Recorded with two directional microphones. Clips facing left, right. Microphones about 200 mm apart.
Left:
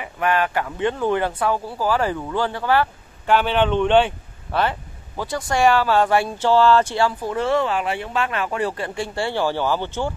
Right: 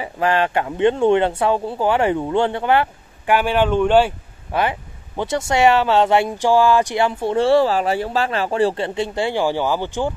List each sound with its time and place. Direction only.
0.0 s speech: 30° right (ahead or behind)